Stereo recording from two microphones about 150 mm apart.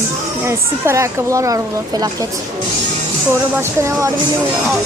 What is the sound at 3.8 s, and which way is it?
Speech, 20° right (ahead or behind).